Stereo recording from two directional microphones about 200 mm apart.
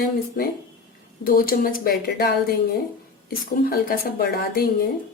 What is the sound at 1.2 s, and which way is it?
A woman's voice, 45° left (ahead or behind).